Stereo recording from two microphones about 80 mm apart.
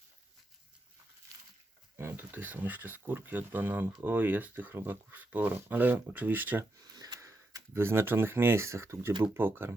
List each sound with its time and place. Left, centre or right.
2.0 s speech: right
6.9 s a sound: right
7.2 s speech: right